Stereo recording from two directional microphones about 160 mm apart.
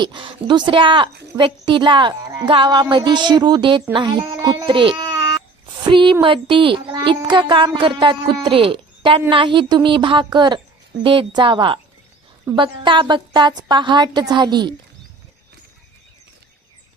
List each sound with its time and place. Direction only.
0.0 s a woman's voice: 30° right (ahead or behind)